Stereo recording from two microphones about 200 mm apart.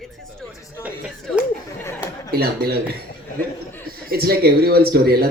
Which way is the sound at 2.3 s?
50° right (ahead or behind).